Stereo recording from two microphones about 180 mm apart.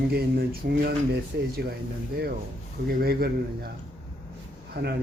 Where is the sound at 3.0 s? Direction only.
55° right (ahead or behind).